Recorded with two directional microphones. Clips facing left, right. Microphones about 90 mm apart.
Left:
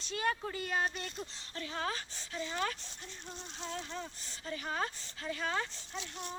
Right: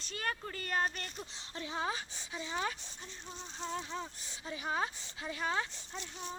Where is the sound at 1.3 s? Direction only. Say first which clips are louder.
Right 1 dB; 20° right (ahead or behind).